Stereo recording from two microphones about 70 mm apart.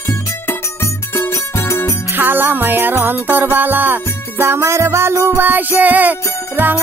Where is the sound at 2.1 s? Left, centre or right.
Right.